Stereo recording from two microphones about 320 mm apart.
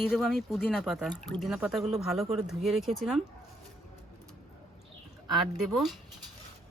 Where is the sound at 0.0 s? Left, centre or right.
Centre.